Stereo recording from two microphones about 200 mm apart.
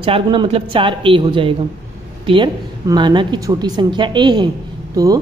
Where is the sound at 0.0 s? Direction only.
25° right (ahead or behind).